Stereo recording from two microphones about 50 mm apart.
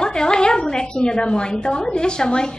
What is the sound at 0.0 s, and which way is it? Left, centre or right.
A woman's voice, centre.